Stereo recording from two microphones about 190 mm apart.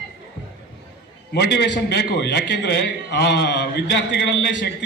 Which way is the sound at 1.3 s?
60° left (ahead or behind).